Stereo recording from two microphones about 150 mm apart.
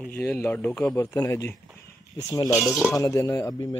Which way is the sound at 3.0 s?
20° left (ahead or behind).